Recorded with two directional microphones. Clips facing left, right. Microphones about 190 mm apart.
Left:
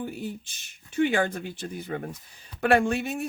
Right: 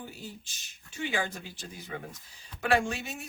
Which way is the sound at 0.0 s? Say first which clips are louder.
Left 10 dB; 55° left (ahead or behind).